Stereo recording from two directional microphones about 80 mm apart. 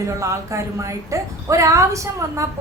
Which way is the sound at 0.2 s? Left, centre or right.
Right.